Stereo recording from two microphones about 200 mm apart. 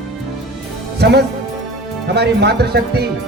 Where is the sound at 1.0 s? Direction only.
55° right (ahead or behind).